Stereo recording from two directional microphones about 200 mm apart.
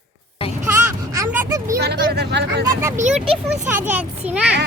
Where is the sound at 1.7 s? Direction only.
55° right (ahead or behind).